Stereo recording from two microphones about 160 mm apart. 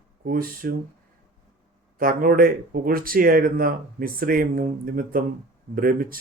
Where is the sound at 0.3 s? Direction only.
65° right (ahead or behind).